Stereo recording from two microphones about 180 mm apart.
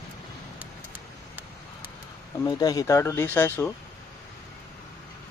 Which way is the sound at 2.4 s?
20° left (ahead or behind).